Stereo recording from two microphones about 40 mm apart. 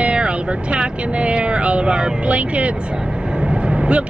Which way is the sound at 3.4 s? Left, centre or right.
Right.